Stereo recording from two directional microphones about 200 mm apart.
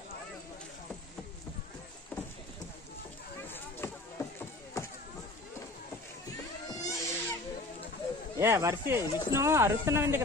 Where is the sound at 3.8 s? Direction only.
10° left (ahead or behind).